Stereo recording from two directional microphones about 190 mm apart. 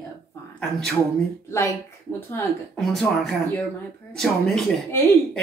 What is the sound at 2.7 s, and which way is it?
Speech, centre (ahead or behind).